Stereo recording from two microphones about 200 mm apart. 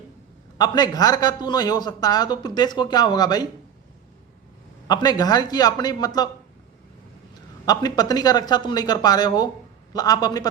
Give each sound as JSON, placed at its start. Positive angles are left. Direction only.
{"t": 0.6, "sound": "a man's voice", "side_deg": 20}
{"t": 4.9, "sound": "a man's voice", "side_deg": 20}
{"t": 7.6, "sound": "a man's voice", "side_deg": 20}